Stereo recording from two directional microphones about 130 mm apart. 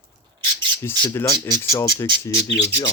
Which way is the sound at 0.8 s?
20° left (ahead or behind).